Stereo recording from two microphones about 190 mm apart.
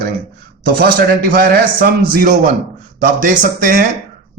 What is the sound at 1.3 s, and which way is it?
A man's voice, 50° right (ahead or behind).